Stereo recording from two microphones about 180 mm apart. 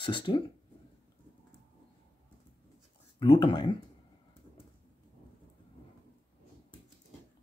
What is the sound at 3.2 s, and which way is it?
Speech, 30° left (ahead or behind).